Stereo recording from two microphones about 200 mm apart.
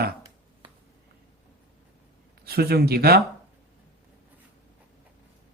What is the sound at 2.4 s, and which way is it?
Speech, 50° right (ahead or behind).